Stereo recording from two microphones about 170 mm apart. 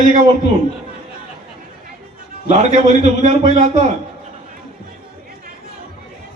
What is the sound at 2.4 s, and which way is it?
Speech, 40° right (ahead or behind).